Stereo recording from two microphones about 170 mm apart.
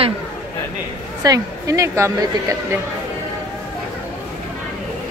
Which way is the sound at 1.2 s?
20° right (ahead or behind).